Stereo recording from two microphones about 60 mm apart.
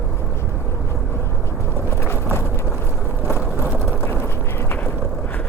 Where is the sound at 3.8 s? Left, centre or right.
Left.